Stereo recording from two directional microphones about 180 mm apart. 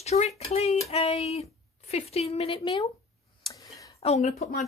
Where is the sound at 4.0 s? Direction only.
35° left (ahead or behind).